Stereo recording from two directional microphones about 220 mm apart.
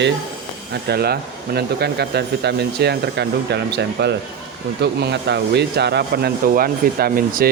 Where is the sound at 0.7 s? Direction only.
45° right (ahead or behind).